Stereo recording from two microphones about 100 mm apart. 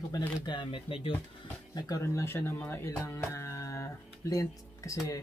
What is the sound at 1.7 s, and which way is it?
Speech, 40° left (ahead or behind).